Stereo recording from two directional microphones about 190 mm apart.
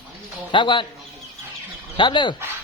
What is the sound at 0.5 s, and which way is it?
Speech, 25° left (ahead or behind).